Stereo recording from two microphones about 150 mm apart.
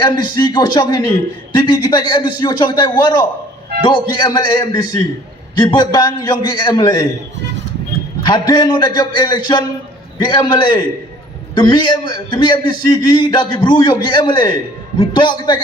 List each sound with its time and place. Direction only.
0.0 s a man's voice: 30° left (ahead or behind)
8.2 s a man's voice: 30° left (ahead or behind)